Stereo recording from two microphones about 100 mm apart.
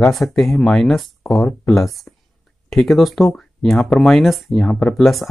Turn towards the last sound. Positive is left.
turn(degrees=0)  # may be behind; listen again after turning